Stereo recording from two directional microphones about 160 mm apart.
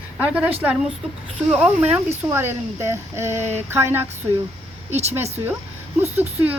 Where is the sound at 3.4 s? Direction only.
45° right (ahead or behind).